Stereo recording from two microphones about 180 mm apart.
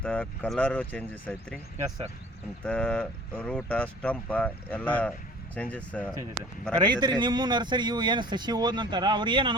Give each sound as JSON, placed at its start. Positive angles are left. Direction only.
{"t": 0.0, "sound": "speech", "side_deg": 5}
{"t": 2.6, "sound": "speech", "side_deg": 5}
{"t": 6.7, "sound": "a man's voice", "side_deg": -25}